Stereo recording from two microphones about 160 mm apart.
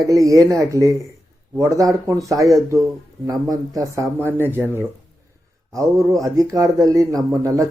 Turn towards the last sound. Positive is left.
turn(degrees=-20)  # may be behind; listen again after turning